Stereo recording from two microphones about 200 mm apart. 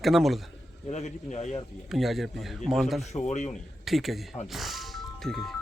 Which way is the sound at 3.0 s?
35° left (ahead or behind).